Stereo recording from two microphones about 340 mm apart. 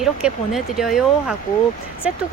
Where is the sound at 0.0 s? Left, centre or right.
Centre.